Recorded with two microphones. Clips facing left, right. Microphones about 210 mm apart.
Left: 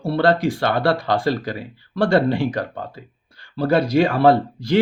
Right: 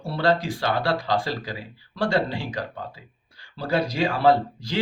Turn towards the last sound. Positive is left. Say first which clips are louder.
# left 7 dB
turn(degrees=60)  # may be behind; listen again after turning